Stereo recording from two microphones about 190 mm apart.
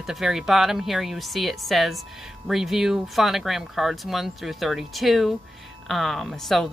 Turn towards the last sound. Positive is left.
turn(degrees=0)  # may be behind; listen again after turning